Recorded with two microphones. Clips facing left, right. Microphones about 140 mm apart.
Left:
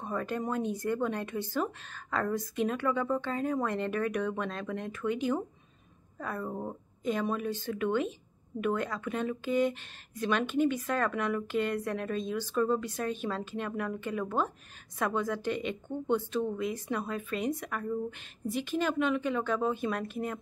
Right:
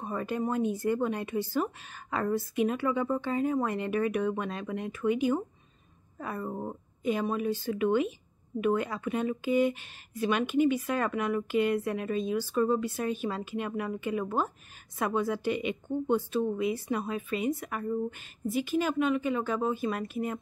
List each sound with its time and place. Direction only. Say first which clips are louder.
0.0 s speech: right 2 dB; 10° right (ahead or behind)